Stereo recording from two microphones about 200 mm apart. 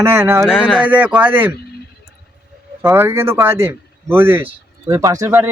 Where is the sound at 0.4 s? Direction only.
Centre (ahead or behind).